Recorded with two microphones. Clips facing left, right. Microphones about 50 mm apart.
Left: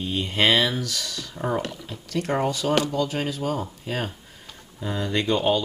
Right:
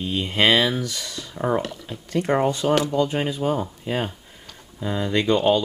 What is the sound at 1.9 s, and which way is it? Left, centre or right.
Speech, centre.